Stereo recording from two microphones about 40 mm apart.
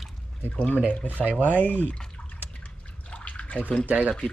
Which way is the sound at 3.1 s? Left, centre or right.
Left.